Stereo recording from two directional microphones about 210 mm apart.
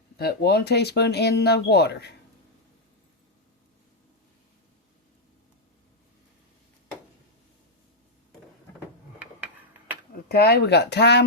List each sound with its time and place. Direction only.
0.2 s speech: 50° left (ahead or behind)
10.2 s speech: 50° left (ahead or behind)